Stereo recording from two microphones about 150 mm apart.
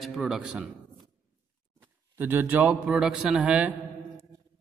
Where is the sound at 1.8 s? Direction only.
15° right (ahead or behind).